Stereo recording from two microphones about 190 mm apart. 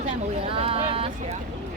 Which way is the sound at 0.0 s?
30° right (ahead or behind).